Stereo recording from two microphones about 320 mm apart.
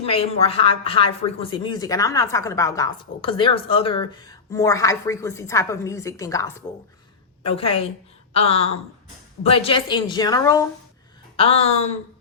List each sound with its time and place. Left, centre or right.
0.0 s speech: centre